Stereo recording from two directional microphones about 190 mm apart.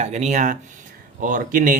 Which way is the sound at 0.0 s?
35° right (ahead or behind).